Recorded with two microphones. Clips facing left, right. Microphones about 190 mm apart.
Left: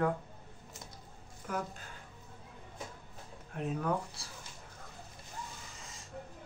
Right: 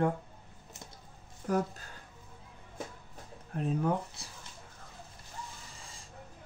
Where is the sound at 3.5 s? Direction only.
25° right (ahead or behind).